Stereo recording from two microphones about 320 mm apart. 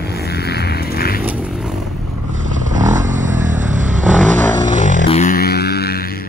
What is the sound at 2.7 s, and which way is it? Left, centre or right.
Vehicle, right.